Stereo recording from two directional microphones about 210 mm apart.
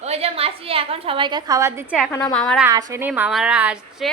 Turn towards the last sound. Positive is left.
turn(degrees=-5)  # may be behind; listen again after turning